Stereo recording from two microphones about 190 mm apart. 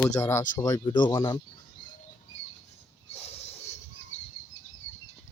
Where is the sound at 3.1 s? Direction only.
35° left (ahead or behind).